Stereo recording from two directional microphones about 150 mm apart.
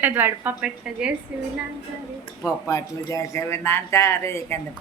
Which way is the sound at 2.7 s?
20° left (ahead or behind).